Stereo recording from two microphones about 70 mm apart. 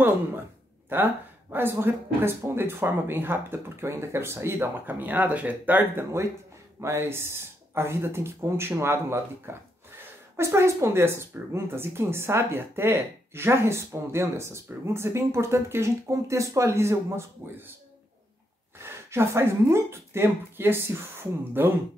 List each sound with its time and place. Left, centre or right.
0.8 s speech: right
6.8 s speech: right
18.8 s speech: right